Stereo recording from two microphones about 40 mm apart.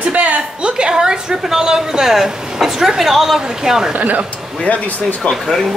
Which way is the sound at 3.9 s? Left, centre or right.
Right.